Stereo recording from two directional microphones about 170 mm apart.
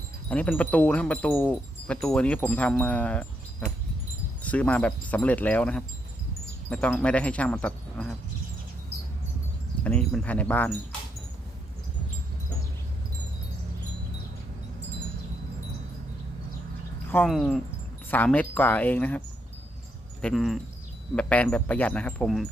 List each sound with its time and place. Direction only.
0.3 s wind chime: 10° left (ahead or behind)
4.4 s wind chime: 10° left (ahead or behind)
9.8 s wind chime: 5° left (ahead or behind)
17.2 s speech: centre (ahead or behind)
18.1 s wind chime: 10° left (ahead or behind)
20.2 s speech: centre (ahead or behind)
21.2 s wind chime: 5° left (ahead or behind)